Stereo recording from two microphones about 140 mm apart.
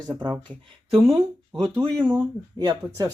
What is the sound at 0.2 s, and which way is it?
Speech, 35° right (ahead or behind).